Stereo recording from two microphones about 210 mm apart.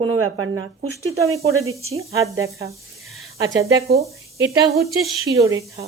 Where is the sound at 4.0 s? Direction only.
15° right (ahead or behind).